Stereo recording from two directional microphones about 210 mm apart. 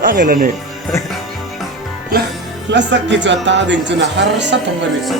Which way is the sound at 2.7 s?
55° right (ahead or behind).